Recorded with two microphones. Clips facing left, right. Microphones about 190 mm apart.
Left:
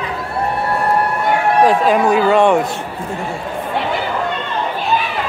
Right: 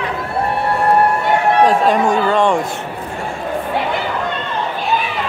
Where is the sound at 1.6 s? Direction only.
5° left (ahead or behind).